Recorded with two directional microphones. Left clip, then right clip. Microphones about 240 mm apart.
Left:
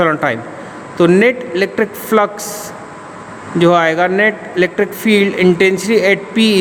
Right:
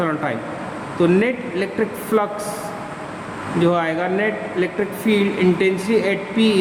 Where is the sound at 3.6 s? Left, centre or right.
Left.